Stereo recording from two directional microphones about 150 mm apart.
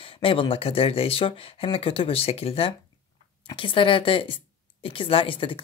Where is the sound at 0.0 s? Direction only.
35° left (ahead or behind).